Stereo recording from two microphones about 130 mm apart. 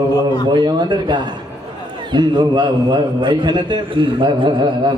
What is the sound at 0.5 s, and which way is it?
A man's voice, 35° right (ahead or behind).